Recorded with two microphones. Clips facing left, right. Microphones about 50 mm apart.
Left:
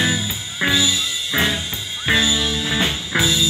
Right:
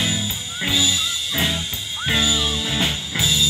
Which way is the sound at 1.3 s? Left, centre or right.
Left.